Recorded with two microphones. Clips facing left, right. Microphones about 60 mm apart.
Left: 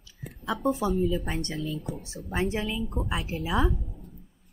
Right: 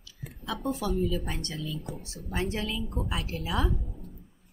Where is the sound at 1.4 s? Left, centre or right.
Left.